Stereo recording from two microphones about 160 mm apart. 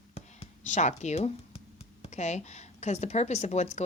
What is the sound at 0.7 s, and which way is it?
A woman's voice, 45° left (ahead or behind).